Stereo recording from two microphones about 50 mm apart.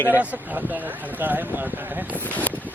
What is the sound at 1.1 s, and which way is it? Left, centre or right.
Speech, right.